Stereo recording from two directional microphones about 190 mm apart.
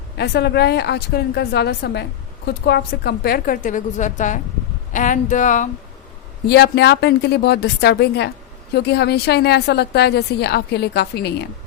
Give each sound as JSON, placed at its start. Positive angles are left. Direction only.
{"t": 0.2, "sound": "a woman's voice", "side_deg": 60}
{"t": 6.5, "sound": "a woman's voice", "side_deg": 60}